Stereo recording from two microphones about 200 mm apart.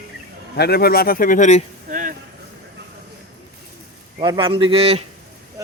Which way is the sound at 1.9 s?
45° right (ahead or behind).